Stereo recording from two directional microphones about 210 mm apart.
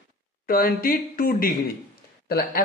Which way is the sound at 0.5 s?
45° left (ahead or behind).